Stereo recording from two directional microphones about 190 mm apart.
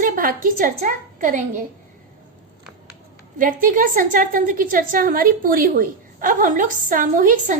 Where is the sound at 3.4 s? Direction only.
45° right (ahead or behind).